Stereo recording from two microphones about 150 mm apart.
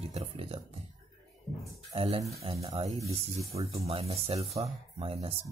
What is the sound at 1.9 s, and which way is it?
Speech, 40° right (ahead or behind).